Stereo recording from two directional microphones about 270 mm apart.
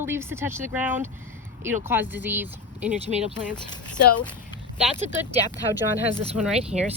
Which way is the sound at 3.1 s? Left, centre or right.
Right.